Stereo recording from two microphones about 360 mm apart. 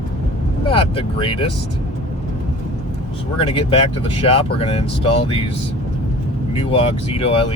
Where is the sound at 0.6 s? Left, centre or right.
Centre.